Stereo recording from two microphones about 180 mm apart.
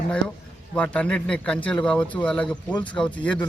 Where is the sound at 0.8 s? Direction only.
5° left (ahead or behind).